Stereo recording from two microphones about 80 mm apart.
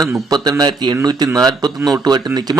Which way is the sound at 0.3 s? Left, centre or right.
Right.